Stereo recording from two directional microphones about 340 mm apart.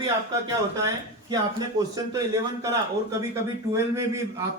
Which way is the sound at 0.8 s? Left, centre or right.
Centre.